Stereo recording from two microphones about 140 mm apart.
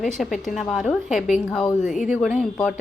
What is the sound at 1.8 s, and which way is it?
Speech, 60° left (ahead or behind).